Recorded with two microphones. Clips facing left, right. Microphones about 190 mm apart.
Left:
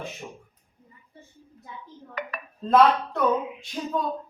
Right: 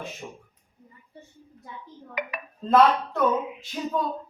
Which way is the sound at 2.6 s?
Centre (ahead or behind).